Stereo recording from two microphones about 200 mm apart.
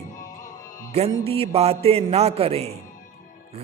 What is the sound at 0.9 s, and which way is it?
A man's voice, 30° right (ahead or behind).